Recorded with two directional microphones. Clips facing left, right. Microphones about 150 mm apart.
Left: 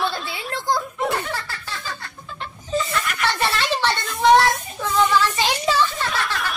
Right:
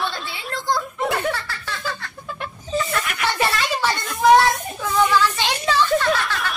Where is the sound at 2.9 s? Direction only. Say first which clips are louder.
Even; 55° right (ahead or behind).